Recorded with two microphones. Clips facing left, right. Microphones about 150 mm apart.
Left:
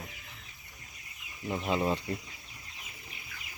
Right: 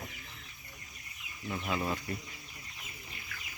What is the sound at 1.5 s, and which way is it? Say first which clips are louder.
Speech: left 5 dB; 25° left (ahead or behind).